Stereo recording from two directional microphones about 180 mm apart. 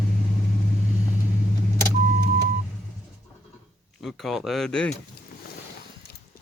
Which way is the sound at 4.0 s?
Centre (ahead or behind).